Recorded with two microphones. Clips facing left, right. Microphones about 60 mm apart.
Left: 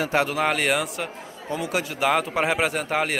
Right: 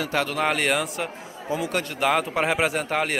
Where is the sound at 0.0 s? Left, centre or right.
Left.